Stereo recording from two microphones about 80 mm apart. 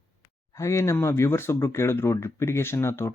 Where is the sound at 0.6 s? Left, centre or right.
Left.